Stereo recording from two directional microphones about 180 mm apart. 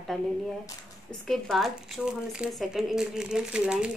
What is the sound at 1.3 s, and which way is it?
Speech, centre (ahead or behind).